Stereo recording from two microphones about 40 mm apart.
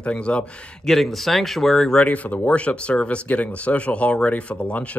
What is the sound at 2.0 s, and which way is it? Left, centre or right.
Speech, left.